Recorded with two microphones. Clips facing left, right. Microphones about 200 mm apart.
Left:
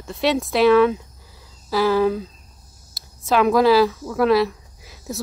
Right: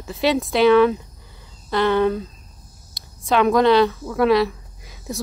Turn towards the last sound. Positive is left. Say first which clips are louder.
# even
turn(degrees=0)  # may be behind; listen again after turning